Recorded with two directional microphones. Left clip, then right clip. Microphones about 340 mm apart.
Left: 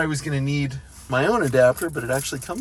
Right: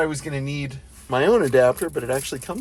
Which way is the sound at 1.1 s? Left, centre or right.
Centre.